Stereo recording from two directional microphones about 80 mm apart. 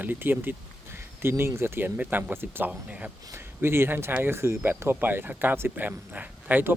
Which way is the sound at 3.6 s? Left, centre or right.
Right.